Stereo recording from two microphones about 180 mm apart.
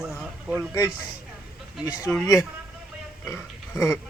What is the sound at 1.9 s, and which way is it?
Speech, 15° left (ahead or behind).